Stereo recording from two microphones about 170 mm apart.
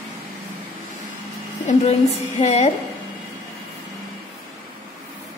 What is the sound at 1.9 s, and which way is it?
Speech, 40° left (ahead or behind).